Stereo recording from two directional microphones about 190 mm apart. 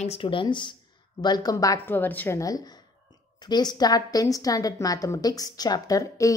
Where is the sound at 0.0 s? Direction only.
30° left (ahead or behind).